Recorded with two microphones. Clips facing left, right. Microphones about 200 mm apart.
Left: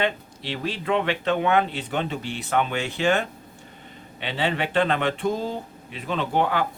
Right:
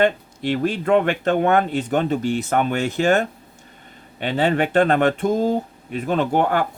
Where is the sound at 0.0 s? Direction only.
50° right (ahead or behind).